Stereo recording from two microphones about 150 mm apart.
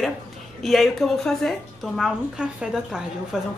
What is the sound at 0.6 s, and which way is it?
A man's voice, centre (ahead or behind).